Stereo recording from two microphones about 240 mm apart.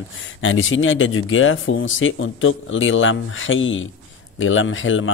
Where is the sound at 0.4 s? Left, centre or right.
Left.